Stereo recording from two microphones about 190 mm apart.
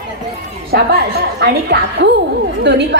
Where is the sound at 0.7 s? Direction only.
50° right (ahead or behind).